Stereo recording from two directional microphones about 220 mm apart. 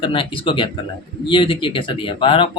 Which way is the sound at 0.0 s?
25° left (ahead or behind).